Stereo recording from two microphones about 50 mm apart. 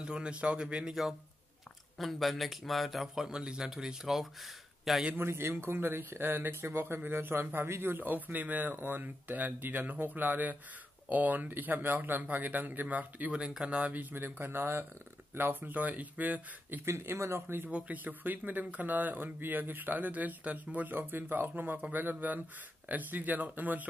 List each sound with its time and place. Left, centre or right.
0.0 s speech: centre
2.0 s a man's voice: centre
3.3 s speech: centre
5.1 s speech: right
13.3 s speech: centre
13.9 s speech: right
16.8 s speech: right
17.6 s speech: right